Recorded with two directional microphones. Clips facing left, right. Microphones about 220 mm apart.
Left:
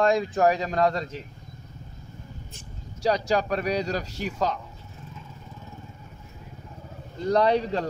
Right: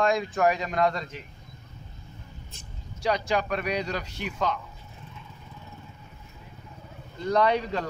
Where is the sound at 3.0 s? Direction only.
40° left (ahead or behind).